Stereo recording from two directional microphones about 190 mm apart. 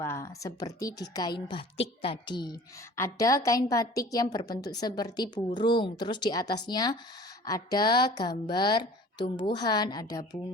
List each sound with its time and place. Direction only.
0.0 s a woman's voice: 15° left (ahead or behind)